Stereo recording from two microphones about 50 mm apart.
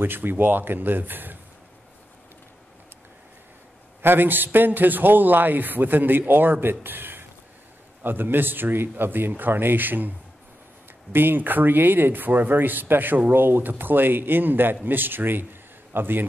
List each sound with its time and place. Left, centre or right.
0.0 s a man's voice: right
4.0 s a man's voice: right